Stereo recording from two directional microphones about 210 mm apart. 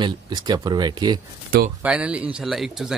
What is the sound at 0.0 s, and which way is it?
Speech, 20° right (ahead or behind).